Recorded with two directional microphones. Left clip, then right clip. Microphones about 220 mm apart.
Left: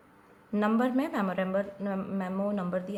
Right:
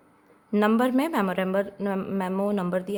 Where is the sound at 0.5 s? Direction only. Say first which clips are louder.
Right 5 dB; 50° right (ahead or behind).